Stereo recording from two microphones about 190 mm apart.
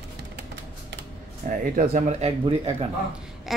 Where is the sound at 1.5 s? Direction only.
45° right (ahead or behind).